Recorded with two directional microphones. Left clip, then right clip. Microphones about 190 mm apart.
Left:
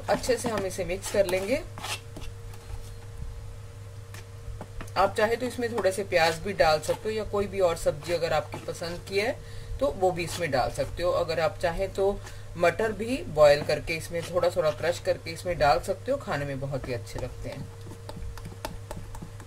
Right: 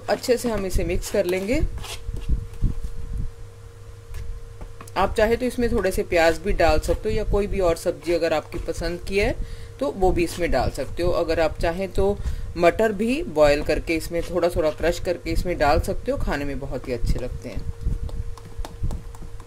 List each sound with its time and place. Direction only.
0.1 s speech: 50° right (ahead or behind)
4.9 s speech: 50° right (ahead or behind)